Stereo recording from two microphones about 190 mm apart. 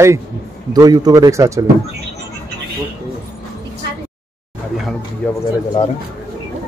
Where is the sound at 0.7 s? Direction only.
20° right (ahead or behind).